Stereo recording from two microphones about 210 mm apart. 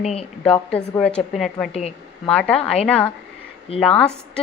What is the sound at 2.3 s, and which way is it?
A woman's voice, 5° left (ahead or behind).